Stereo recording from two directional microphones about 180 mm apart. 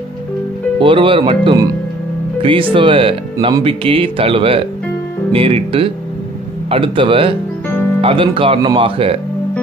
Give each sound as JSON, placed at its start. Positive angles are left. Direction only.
{"t": 0.7, "sound": "speech", "side_deg": -30}